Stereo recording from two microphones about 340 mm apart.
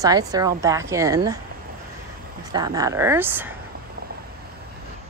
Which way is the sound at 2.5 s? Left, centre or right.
Centre.